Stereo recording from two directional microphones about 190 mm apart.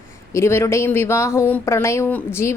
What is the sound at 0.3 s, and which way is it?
A woman's voice, 15° left (ahead or behind).